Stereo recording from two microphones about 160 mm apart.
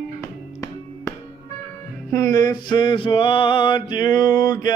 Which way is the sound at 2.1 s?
25° left (ahead or behind).